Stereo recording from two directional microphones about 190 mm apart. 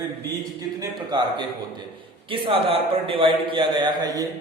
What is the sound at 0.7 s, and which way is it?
A man's voice, 25° right (ahead or behind).